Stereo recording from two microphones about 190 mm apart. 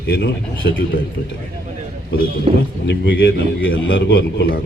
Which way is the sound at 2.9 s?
65° left (ahead or behind).